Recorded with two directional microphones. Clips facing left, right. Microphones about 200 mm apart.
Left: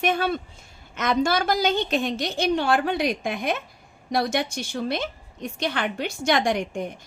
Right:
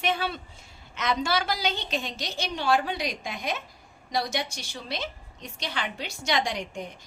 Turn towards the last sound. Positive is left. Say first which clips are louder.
# left 8 dB
turn(degrees=55)  # may be behind; listen again after turning